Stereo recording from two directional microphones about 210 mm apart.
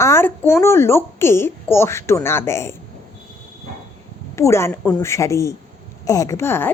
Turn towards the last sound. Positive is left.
turn(degrees=10)  # may be behind; listen again after turning